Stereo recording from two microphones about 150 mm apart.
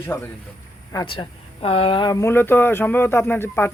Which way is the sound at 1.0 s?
35° left (ahead or behind).